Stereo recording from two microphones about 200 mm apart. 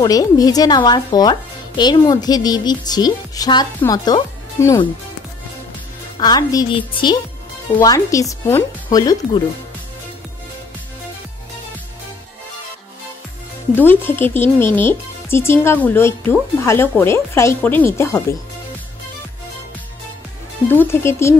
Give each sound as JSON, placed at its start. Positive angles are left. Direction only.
{"t": 0.0, "sound": "speech", "side_deg": 20}
{"t": 6.1, "sound": "speech", "side_deg": 20}
{"t": 13.7, "sound": "speech", "side_deg": 10}
{"t": 20.6, "sound": "speech", "side_deg": 10}